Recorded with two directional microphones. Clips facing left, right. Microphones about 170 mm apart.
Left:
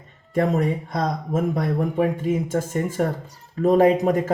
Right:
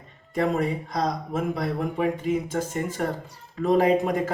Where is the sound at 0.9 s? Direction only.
45° left (ahead or behind).